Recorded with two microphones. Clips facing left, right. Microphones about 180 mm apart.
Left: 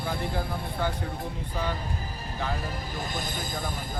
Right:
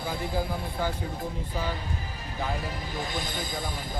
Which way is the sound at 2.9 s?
45° left (ahead or behind).